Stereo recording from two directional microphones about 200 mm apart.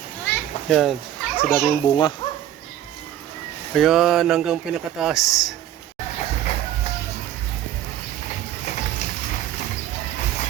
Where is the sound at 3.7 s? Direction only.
Centre (ahead or behind).